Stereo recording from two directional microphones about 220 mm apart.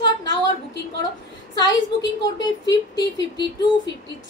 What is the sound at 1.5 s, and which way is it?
A woman's voice, 15° left (ahead or behind).